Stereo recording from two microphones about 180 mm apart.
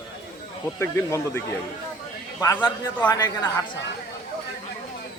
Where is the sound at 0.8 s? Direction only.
15° left (ahead or behind).